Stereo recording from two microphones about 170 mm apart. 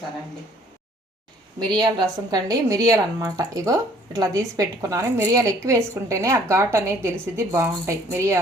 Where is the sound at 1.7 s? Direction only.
25° right (ahead or behind).